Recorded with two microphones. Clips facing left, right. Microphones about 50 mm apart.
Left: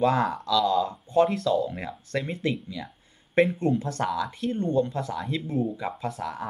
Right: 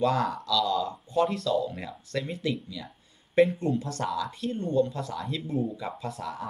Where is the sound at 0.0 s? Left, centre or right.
Left.